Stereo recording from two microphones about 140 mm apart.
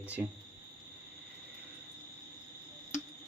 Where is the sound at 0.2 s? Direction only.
5° right (ahead or behind).